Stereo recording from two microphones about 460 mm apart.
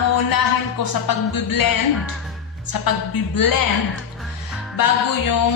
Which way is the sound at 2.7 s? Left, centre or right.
Left.